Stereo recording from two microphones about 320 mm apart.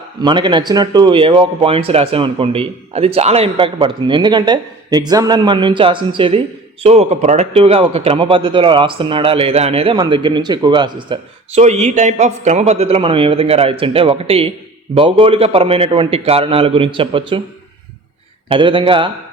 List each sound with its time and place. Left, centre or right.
0.2 s a man's voice: centre
18.4 s a man's voice: centre